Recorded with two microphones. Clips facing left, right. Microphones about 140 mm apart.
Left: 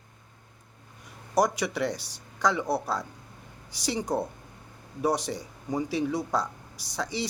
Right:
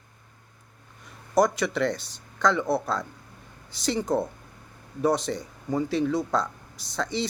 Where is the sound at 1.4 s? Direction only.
10° left (ahead or behind).